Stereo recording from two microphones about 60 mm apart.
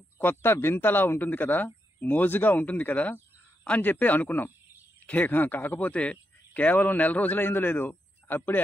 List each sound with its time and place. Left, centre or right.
0.2 s speech: left